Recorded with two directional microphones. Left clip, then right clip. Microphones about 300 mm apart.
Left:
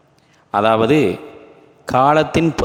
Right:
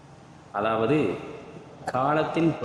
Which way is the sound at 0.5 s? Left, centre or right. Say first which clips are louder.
Left 10 dB; left.